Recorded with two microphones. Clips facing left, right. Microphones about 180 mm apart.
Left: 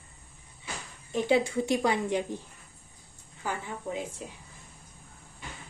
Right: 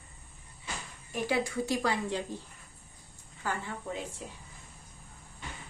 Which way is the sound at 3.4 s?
15° left (ahead or behind).